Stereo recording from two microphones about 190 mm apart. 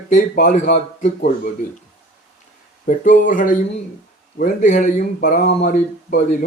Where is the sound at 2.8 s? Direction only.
45° left (ahead or behind).